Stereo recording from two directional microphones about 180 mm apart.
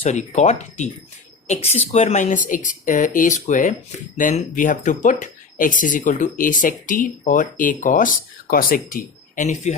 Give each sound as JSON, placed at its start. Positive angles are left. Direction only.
{"t": 0.0, "sound": "speech", "side_deg": 40}